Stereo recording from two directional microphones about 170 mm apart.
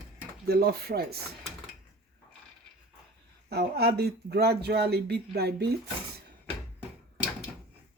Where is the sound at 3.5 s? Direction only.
70° right (ahead or behind).